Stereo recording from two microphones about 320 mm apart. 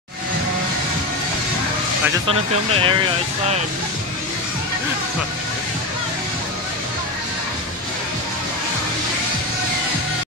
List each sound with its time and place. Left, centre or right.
2.2 s speech: centre